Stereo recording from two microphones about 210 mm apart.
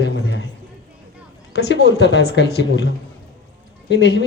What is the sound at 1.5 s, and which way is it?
A man's voice, 55° left (ahead or behind).